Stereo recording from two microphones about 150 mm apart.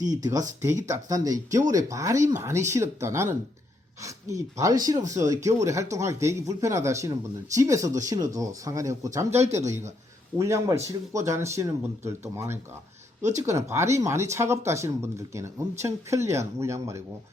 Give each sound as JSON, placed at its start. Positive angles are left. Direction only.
{"t": 0.0, "sound": "speech", "side_deg": -25}
{"t": 9.4, "sound": "speech", "side_deg": -50}
{"t": 10.3, "sound": "speech", "side_deg": -20}
{"t": 13.4, "sound": "speech", "side_deg": -20}